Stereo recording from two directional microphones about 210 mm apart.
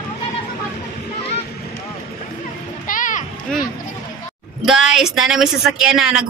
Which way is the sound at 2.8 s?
40° left (ahead or behind).